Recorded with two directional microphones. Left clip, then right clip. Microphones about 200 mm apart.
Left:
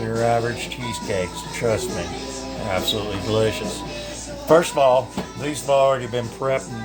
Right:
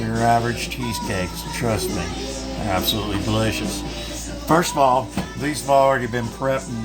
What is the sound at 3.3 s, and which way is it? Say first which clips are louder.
Speech: left 4 dB; 20° left (ahead or behind).